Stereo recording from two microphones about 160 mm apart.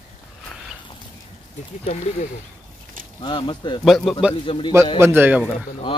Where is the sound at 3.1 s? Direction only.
30° left (ahead or behind).